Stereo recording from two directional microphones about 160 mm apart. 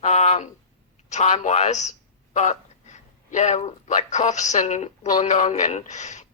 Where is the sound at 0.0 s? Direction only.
45° left (ahead or behind).